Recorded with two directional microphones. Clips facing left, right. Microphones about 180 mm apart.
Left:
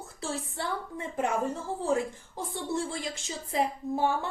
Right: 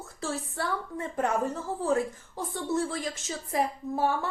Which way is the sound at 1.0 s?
10° left (ahead or behind).